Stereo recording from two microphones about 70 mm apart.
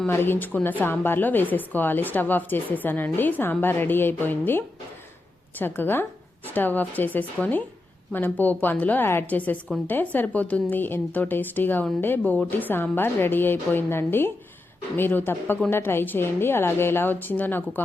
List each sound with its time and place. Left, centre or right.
0.1 s a woman's voice: left